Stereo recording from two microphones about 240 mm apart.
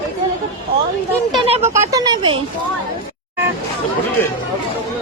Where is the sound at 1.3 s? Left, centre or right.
Right.